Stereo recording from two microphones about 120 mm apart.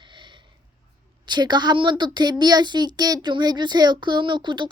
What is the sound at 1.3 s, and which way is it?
Speech, 35° right (ahead or behind).